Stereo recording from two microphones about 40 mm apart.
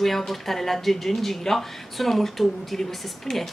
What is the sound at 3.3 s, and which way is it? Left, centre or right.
Speech, centre.